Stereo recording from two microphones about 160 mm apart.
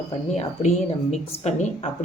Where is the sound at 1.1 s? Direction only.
45° left (ahead or behind).